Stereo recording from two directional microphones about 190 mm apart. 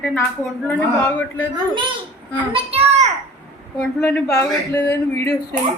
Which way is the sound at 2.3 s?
30° right (ahead or behind).